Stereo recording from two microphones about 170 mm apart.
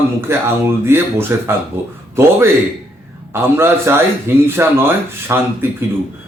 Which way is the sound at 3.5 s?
15° right (ahead or behind).